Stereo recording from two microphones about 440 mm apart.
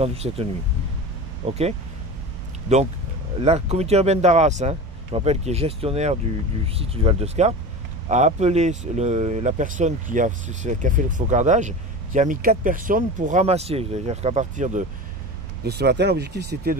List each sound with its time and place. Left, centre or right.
0.0 s speech: centre
3.3 s speech: centre